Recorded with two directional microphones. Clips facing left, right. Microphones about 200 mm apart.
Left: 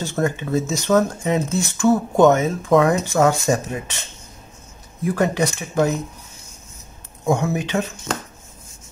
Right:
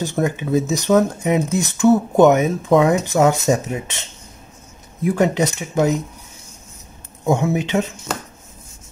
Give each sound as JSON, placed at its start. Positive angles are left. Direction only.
{"t": 0.0, "sound": "speech", "side_deg": -15}
{"t": 5.0, "sound": "speech", "side_deg": -20}
{"t": 7.2, "sound": "speech", "side_deg": -20}